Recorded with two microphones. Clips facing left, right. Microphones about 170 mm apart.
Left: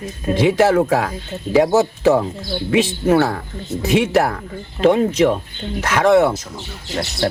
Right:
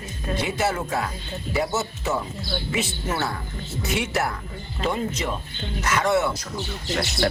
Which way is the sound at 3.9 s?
90° left.